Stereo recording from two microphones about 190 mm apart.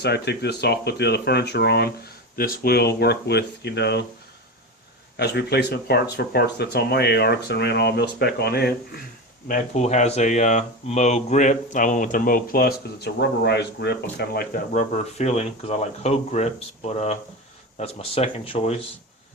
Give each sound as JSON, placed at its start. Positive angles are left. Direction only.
{"t": 0.0, "sound": "speech", "side_deg": 60}
{"t": 5.1, "sound": "speech", "side_deg": 60}
{"t": 9.5, "sound": "speech", "side_deg": 40}